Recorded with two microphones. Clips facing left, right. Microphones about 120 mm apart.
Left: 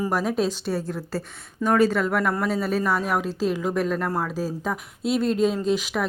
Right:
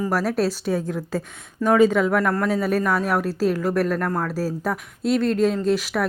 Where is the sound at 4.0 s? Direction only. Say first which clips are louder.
Right 2 dB; 5° left (ahead or behind).